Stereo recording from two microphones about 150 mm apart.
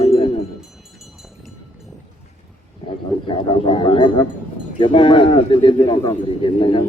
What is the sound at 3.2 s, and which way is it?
A man's voice, 35° left (ahead or behind).